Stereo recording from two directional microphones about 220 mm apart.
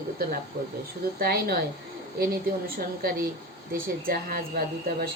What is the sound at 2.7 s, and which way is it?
A woman's voice, 40° right (ahead or behind).